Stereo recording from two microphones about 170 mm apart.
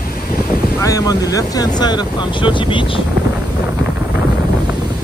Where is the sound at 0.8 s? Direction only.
20° left (ahead or behind).